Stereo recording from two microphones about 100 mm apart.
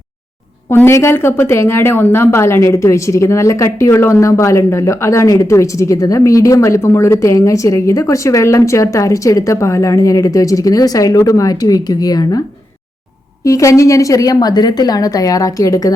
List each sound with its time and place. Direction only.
0.7 s a woman's voice: 25° left (ahead or behind); by 12.4 s 40° left (ahead or behind)
13.4 s a woman's voice: 35° left (ahead or behind)